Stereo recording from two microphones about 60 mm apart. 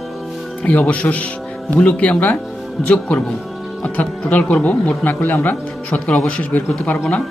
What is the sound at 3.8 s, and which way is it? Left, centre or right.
Speech, left.